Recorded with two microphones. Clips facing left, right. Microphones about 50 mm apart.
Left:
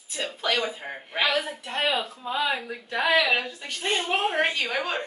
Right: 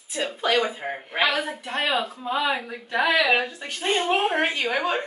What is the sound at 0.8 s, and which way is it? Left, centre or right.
Speech, right.